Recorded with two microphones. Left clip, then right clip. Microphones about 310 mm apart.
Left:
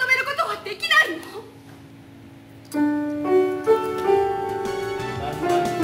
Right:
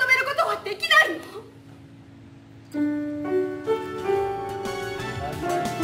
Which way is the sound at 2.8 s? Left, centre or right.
Centre.